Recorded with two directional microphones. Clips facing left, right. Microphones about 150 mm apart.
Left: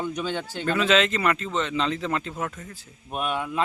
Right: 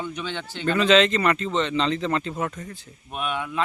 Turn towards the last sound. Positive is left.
turn(degrees=40)  # may be behind; listen again after turning